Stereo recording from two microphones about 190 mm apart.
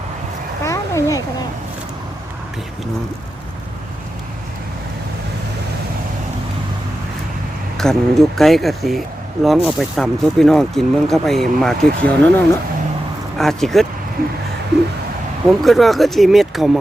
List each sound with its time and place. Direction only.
0.6 s a sound: 15° left (ahead or behind)
7.8 s speech: centre (ahead or behind)
13.4 s speech: centre (ahead or behind)
15.4 s speech: centre (ahead or behind)